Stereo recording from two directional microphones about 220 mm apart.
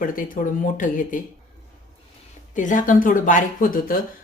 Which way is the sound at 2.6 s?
35° left (ahead or behind).